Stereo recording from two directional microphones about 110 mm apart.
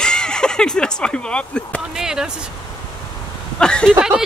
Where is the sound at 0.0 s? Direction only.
5° left (ahead or behind).